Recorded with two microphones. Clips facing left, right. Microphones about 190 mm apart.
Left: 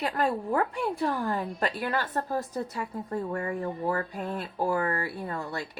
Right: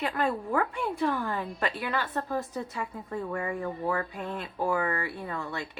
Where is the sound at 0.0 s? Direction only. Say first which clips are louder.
Left 1 dB; 35° left (ahead or behind).